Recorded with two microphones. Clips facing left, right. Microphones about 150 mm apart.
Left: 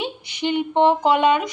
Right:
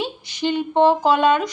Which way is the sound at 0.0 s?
15° left (ahead or behind).